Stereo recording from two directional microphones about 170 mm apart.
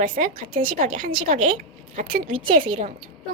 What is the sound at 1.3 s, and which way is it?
Speech, 45° right (ahead or behind).